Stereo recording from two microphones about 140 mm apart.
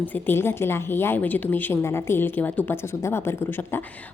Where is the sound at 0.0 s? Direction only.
15° left (ahead or behind).